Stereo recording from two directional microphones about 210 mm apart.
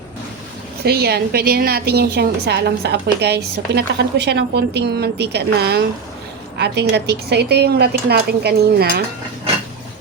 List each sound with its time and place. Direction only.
0.9 s a woman's voice: 50° right (ahead or behind)